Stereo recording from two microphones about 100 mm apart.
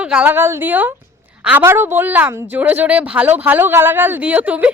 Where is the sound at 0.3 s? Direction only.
25° right (ahead or behind).